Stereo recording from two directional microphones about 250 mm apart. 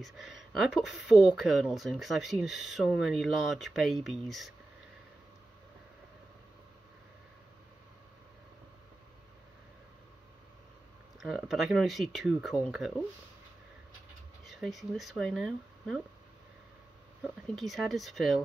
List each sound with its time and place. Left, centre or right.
0.0 s speech: centre
11.1 s speech: centre
14.4 s speech: centre
17.6 s speech: centre